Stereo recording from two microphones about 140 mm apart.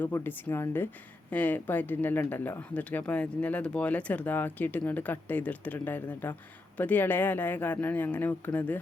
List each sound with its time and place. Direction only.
0.0 s speech: 15° left (ahead or behind)